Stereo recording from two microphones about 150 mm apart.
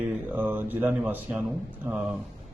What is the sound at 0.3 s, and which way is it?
Speech, 15° right (ahead or behind).